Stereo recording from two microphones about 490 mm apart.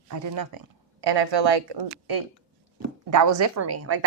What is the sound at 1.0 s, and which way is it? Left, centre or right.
A woman's voice, right.